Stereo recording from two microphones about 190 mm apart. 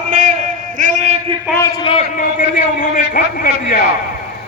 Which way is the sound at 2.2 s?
45° left (ahead or behind).